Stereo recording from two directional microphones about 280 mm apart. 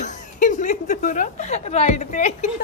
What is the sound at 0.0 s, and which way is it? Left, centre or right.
A woman's voice, left.